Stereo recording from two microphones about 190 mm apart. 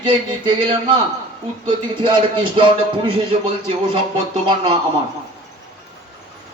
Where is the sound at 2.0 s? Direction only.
25° right (ahead or behind).